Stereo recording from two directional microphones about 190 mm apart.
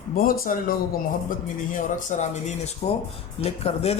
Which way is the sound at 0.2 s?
50° left (ahead or behind).